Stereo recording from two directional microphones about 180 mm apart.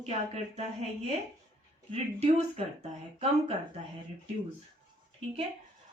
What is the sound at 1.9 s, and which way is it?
A woman's voice, 35° right (ahead or behind).